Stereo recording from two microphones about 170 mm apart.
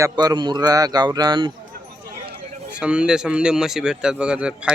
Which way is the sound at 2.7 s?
5° right (ahead or behind).